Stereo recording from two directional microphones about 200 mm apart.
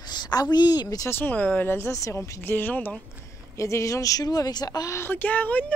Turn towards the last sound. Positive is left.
turn(degrees=10)  # may be behind; listen again after turning